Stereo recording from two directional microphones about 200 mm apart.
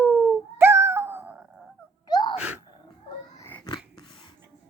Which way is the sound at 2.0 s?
20° left (ahead or behind).